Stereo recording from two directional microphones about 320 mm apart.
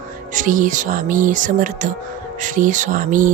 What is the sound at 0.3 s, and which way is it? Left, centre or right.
Speech, right.